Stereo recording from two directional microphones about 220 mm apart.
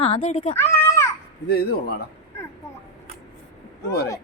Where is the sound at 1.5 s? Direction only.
45° left (ahead or behind).